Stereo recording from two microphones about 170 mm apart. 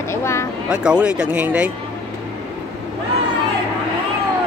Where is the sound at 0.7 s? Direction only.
5° right (ahead or behind).